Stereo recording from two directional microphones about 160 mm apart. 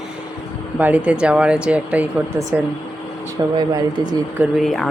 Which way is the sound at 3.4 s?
25° right (ahead or behind).